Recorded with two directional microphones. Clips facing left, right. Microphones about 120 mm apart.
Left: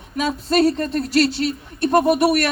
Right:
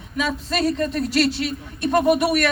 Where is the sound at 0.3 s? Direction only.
35° left (ahead or behind).